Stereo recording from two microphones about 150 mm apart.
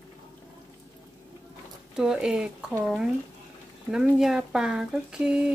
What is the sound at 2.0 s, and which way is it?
Speech, 5° right (ahead or behind).